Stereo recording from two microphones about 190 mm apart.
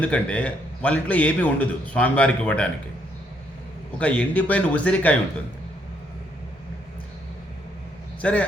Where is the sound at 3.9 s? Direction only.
5° left (ahead or behind).